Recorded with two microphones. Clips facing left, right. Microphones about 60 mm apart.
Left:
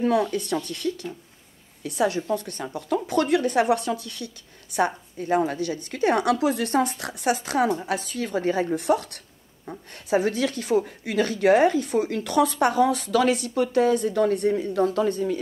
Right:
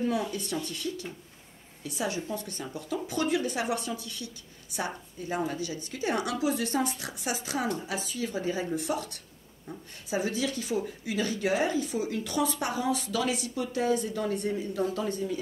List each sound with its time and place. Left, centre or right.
0.0 s speech: left